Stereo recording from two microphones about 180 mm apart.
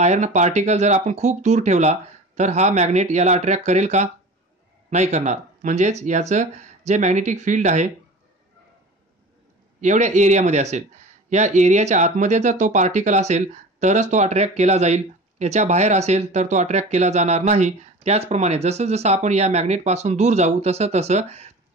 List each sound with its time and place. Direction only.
0.0 s speech: 40° right (ahead or behind)
9.8 s speech: 40° right (ahead or behind)